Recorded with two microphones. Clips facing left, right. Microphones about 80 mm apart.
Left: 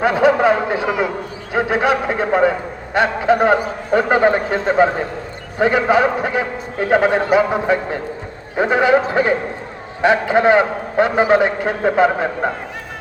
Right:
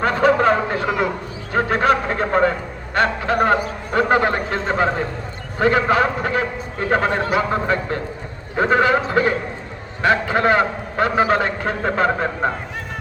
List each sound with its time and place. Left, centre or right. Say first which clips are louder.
0.0 s a man's voice: left 2 dB; centre